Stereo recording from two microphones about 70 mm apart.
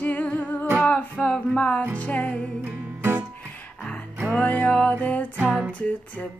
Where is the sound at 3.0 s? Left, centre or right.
Right.